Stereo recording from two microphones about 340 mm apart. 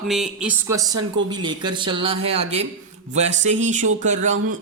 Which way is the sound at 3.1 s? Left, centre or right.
Right.